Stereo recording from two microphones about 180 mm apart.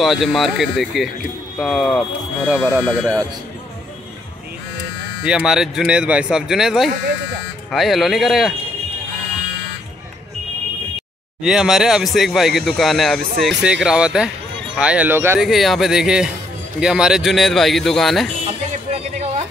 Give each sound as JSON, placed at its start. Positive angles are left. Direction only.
{"t": 0.0, "sound": "a man's voice", "side_deg": 0}
{"t": 5.2, "sound": "a man's voice", "side_deg": -5}
{"t": 11.4, "sound": "a man's voice", "side_deg": -5}
{"t": 15.4, "sound": "a man's voice", "side_deg": 0}
{"t": 18.5, "sound": "a sound", "side_deg": -35}